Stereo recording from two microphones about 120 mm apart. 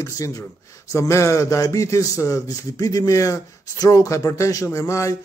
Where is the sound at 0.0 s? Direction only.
30° left (ahead or behind).